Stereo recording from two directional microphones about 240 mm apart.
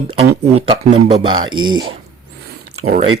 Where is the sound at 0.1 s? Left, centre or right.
Right.